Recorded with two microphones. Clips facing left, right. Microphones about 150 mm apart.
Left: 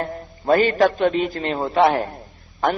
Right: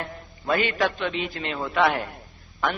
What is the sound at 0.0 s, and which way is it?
A man's voice, 40° left (ahead or behind).